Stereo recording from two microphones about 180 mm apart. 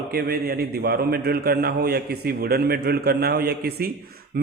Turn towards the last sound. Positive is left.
turn(degrees=-55)  # may be behind; listen again after turning